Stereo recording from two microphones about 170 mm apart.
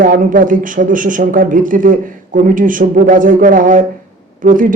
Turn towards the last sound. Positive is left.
turn(degrees=-50)  # may be behind; listen again after turning